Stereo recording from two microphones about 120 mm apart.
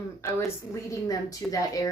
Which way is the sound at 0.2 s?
25° left (ahead or behind).